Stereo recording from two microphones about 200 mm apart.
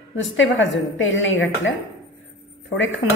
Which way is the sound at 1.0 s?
70° left (ahead or behind).